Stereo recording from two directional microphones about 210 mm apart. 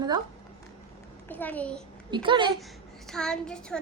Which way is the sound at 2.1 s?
25° right (ahead or behind).